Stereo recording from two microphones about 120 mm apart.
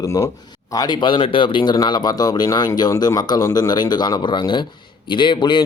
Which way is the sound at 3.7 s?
35° left (ahead or behind).